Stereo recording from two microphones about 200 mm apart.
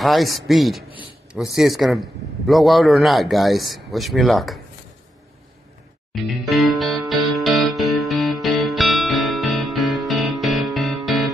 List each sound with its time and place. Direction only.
0.0 s a man's voice: centre (ahead or behind)
6.4 s music: centre (ahead or behind)